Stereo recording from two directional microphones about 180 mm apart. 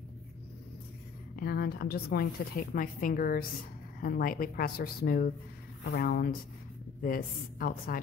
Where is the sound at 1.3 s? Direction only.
60° left (ahead or behind).